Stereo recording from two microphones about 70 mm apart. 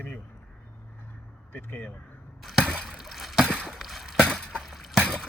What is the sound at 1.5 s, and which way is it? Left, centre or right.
Speech, left.